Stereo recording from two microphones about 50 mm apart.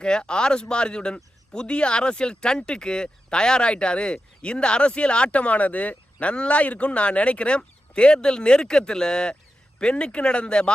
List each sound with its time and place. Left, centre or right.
0.0 s speech: centre